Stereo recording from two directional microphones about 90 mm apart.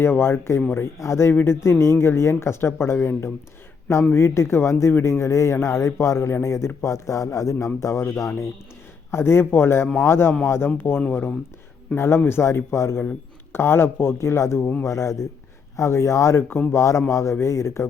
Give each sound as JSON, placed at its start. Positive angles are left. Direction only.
{"t": 0.0, "sound": "speech", "side_deg": 25}